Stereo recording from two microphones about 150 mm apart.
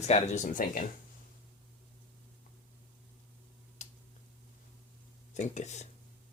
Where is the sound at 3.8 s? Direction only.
50° left (ahead or behind).